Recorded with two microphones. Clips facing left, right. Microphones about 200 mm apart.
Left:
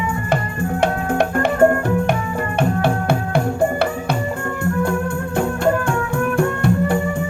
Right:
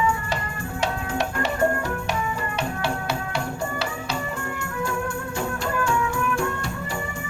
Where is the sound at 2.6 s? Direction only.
55° left (ahead or behind).